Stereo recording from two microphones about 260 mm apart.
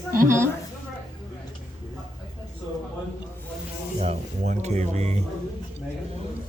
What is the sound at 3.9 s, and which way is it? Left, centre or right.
Speech, right.